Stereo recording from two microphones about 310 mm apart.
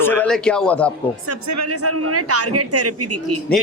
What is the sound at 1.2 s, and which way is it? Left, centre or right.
A woman's voice, right.